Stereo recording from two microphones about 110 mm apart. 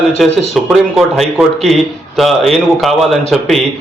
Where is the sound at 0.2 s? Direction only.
Centre (ahead or behind).